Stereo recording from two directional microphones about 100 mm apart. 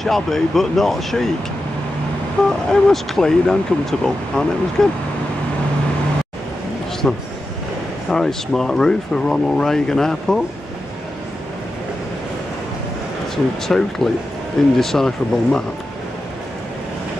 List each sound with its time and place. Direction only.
0.0 s speech: centre (ahead or behind)
2.4 s speech: 5° left (ahead or behind)
7.0 s speech: 10° left (ahead or behind)
13.7 s speech: 5° left (ahead or behind)